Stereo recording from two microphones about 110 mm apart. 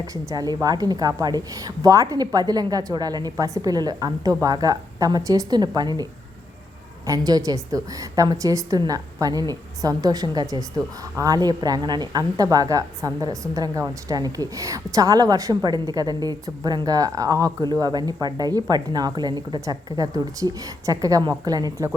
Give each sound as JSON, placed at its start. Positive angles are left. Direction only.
{"t": 0.1, "sound": "a woman's voice", "side_deg": -35}
{"t": 19.6, "sound": "a woman's voice", "side_deg": -30}